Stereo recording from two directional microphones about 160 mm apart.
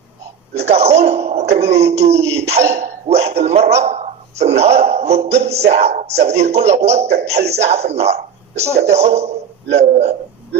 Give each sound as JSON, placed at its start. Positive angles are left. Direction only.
{"t": 0.6, "sound": "a man's voice", "side_deg": -40}